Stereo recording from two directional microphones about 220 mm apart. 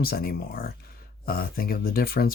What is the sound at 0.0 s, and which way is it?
Speech, 45° left (ahead or behind).